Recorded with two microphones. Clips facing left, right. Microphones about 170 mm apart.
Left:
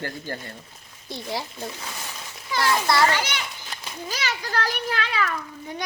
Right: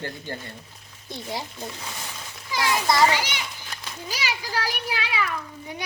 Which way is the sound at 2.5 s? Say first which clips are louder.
Left 1 dB; 15° right (ahead or behind).